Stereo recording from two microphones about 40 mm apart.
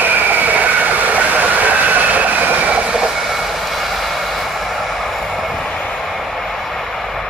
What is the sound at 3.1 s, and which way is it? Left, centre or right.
Vehicle, centre.